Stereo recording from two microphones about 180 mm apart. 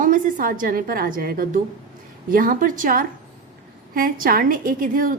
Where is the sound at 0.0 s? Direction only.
50° right (ahead or behind).